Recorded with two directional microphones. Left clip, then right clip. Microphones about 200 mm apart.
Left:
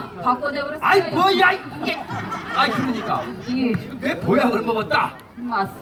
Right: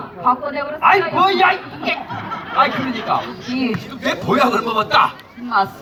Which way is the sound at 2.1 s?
35° right (ahead or behind).